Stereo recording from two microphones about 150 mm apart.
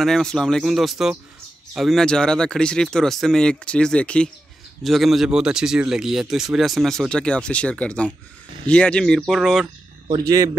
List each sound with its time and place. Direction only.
0.0 s speech: 5° left (ahead or behind)
10.0 s speech: 25° right (ahead or behind)